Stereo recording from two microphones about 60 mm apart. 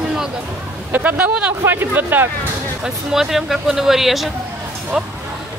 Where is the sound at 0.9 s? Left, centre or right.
Right.